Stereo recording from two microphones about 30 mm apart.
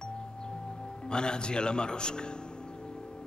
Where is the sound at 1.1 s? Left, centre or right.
Left.